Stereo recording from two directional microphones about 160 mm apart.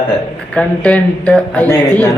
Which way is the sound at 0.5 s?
5° left (ahead or behind).